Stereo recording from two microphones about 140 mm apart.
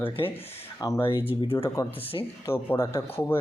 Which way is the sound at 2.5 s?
20° left (ahead or behind).